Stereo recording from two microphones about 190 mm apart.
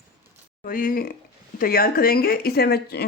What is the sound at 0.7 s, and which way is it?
Speech, 45° left (ahead or behind).